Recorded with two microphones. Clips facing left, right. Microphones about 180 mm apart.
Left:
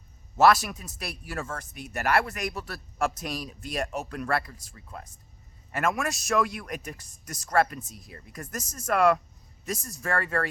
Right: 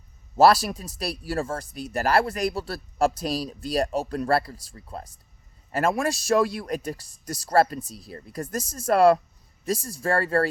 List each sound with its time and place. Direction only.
0.3 s speech: 30° right (ahead or behind)